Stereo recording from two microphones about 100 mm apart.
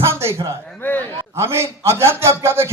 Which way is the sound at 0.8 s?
20° left (ahead or behind).